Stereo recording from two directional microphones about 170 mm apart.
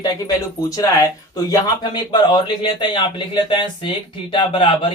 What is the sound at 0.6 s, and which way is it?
Speech, 20° left (ahead or behind).